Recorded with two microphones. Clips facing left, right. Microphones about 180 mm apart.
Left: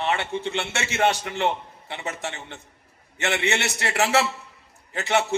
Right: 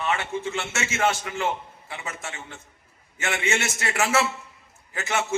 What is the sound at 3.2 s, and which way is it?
A man's voice, 35° left (ahead or behind).